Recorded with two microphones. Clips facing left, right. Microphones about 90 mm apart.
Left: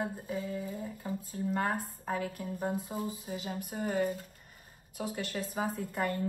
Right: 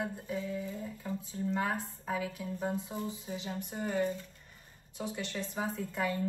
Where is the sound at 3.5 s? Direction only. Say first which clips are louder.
Left 1 dB; 5° left (ahead or behind).